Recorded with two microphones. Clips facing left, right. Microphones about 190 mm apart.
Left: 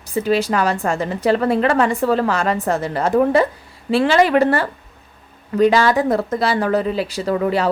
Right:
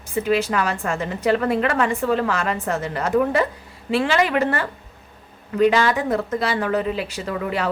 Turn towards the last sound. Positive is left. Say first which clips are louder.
# left 6 dB
turn(degrees=35)  # may be behind; listen again after turning